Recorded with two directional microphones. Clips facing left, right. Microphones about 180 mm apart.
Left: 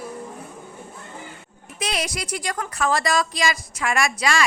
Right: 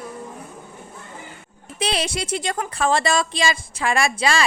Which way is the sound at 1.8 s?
30° right (ahead or behind).